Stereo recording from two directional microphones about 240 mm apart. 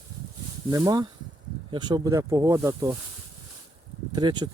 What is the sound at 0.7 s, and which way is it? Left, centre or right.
Speech, centre.